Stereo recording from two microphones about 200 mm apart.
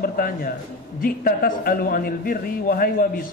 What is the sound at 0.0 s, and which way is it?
A man's voice, 45° left (ahead or behind).